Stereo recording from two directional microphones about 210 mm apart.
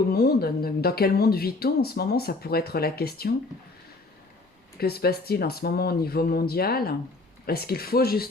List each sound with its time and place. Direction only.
0.1 s speech: 50° left (ahead or behind)
4.8 s speech: 50° left (ahead or behind)